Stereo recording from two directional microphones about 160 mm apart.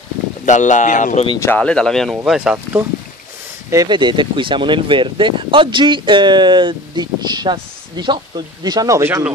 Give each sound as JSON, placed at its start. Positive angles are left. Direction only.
{"t": 0.5, "sound": "speech", "side_deg": 50}
{"t": 1.4, "sound": "speech", "side_deg": 10}
{"t": 3.7, "sound": "speech", "side_deg": -25}